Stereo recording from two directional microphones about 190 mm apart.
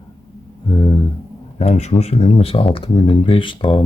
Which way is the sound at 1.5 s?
35° left (ahead or behind).